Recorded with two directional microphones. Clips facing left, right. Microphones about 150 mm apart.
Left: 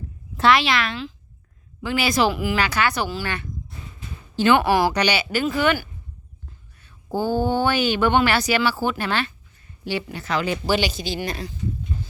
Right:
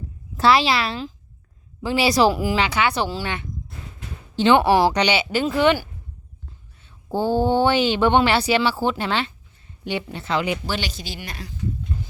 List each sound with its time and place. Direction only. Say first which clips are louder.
0.3 s speech: right 1 dB; 35° right (ahead or behind)
7.2 s speech: right 2 dB; 25° right (ahead or behind)
10.7 s speech: left 6 dB; 10° left (ahead or behind)
11.2 s speech: left 8 dB; 30° left (ahead or behind)